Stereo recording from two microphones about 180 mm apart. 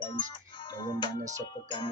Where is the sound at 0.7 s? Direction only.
25° left (ahead or behind).